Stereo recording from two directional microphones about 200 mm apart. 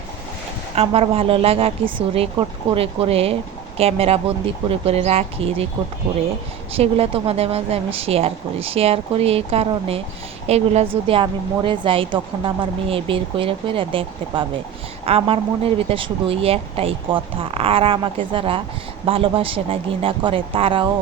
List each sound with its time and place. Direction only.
0.8 s speech: 30° right (ahead or behind)
6.7 s a woman's voice: 30° right (ahead or behind)